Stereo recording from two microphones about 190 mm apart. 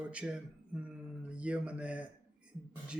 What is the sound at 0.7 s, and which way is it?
Speech, 5° right (ahead or behind).